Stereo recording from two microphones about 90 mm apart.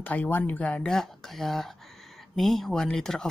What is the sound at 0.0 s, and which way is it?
Speech, 15° left (ahead or behind).